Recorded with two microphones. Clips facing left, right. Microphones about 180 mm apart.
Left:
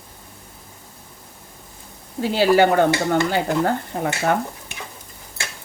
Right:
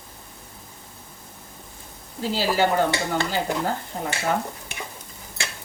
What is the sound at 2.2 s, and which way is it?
A woman's voice, 60° left (ahead or behind).